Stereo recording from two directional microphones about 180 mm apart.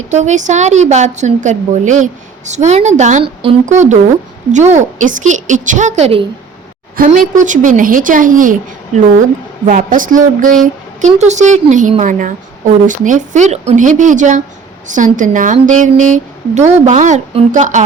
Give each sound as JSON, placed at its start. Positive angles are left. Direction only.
{"t": 0.1, "sound": "a woman's voice", "side_deg": -40}
{"t": 6.9, "sound": "a woman's voice", "side_deg": -50}
{"t": 9.6, "sound": "a woman's voice", "side_deg": -50}